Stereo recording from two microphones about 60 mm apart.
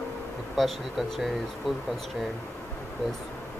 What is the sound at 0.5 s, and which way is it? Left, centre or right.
Speech, centre.